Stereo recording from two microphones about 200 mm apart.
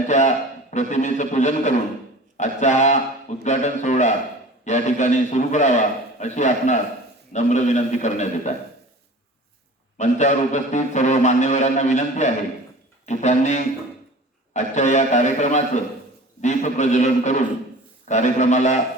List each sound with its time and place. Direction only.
0.1 s a man's voice: 35° left (ahead or behind)
10.0 s a man's voice: 35° left (ahead or behind)